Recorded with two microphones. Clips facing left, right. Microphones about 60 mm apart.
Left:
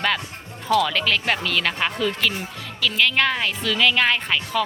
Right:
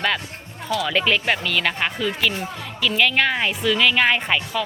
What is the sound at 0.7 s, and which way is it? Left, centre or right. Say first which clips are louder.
Speech: left 1 dB; centre.